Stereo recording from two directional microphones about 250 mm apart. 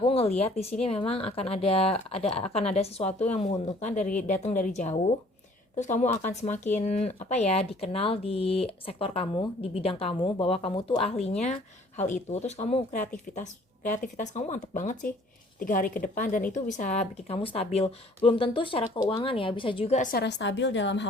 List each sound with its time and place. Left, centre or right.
0.0 s speech: left